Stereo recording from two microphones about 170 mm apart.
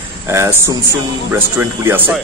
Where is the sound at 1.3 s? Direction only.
15° right (ahead or behind).